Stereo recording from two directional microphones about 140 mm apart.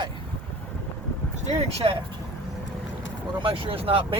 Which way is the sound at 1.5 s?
40° right (ahead or behind).